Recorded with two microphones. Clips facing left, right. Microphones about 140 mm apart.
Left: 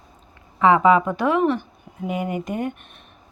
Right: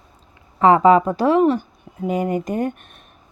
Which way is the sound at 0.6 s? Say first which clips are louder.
Right 3 dB; 40° right (ahead or behind).